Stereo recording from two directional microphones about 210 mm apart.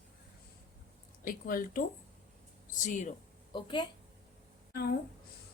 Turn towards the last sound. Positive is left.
turn(degrees=45)  # may be behind; listen again after turning